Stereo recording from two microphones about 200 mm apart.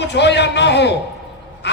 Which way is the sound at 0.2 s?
60° left (ahead or behind).